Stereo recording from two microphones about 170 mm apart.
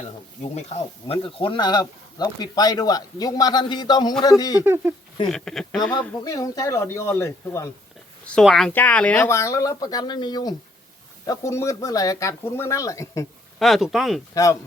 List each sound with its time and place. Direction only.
0.5 s speech: 35° left (ahead or behind)
4.6 s speech: 15° right (ahead or behind)
5.3 s speech: 5° left (ahead or behind)
6.2 s speech: 20° left (ahead or behind)
8.3 s speech: centre (ahead or behind); by 13.2 s 20° left (ahead or behind)
13.6 s speech: centre (ahead or behind)
14.3 s speech: 20° left (ahead or behind)